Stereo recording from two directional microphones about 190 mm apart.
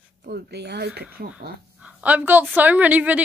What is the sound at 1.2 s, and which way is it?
Speech, 45° right (ahead or behind).